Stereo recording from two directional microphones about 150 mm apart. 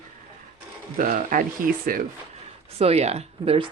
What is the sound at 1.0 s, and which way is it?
Speech, 65° right (ahead or behind).